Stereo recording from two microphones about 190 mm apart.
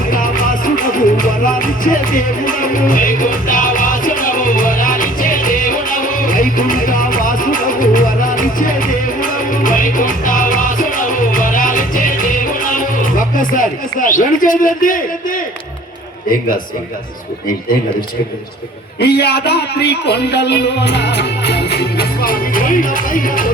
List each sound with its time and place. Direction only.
0.1 s music: 45° left (ahead or behind)
18.9 s a man's voice: 55° left (ahead or behind)